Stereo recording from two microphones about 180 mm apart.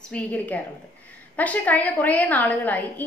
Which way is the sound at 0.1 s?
10° left (ahead or behind).